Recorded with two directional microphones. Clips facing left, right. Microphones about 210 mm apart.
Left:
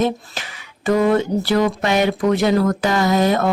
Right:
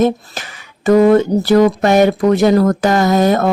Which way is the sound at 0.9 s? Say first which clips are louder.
Right 7 dB; 45° right (ahead or behind).